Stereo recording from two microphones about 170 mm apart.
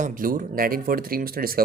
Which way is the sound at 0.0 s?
55° right (ahead or behind).